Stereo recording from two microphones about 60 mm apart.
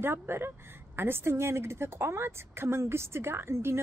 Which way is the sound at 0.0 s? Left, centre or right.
Right.